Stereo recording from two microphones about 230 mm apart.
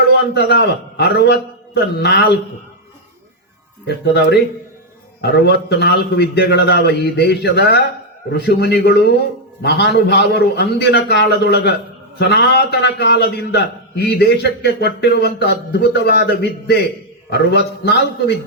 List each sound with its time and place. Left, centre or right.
0.3 s a man's voice: left
3.8 s a man's voice: left